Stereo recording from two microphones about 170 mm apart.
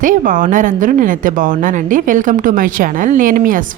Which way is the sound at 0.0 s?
55° right (ahead or behind).